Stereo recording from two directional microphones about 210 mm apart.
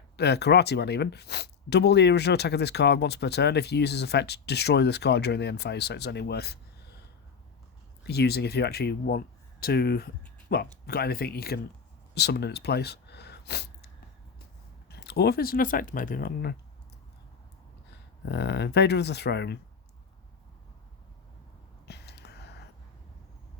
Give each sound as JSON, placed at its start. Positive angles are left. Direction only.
{"t": 0.2, "sound": "speech", "side_deg": 55}
{"t": 8.0, "sound": "speech", "side_deg": 50}
{"t": 12.1, "sound": "a sound", "side_deg": 50}
{"t": 14.8, "sound": "speech", "side_deg": 50}
{"t": 18.3, "sound": "speech", "side_deg": 55}
{"t": 21.8, "sound": "a sound", "side_deg": 55}